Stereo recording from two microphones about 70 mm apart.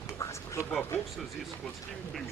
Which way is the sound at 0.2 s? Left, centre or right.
Left.